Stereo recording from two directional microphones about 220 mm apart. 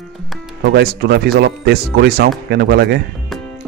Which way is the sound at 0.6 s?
50° right (ahead or behind).